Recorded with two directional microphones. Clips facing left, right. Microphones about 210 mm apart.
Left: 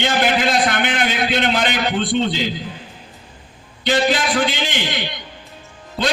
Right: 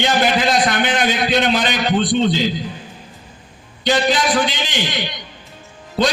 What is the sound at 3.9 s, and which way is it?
A man's voice, 55° left (ahead or behind).